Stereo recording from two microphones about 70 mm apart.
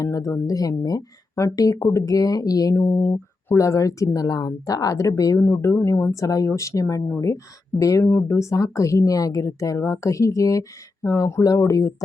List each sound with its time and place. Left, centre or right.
0.0 s speech: left
2.7 s speech: left
3.6 s speech: left
5.4 s speech: left